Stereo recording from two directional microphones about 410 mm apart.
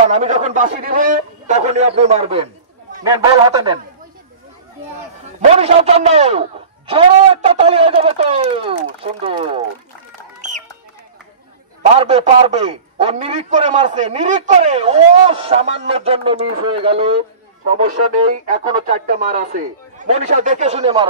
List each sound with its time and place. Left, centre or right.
0.0 s a man's voice: centre
5.5 s a man's voice: centre
12.0 s a man's voice: centre